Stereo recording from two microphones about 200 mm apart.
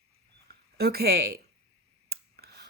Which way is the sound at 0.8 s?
50° right (ahead or behind).